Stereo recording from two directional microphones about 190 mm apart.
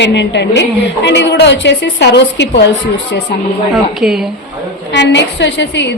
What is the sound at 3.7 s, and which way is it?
Speech, centre (ahead or behind).